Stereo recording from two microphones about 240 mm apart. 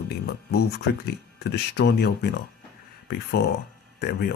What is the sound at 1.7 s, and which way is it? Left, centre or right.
Speech, left.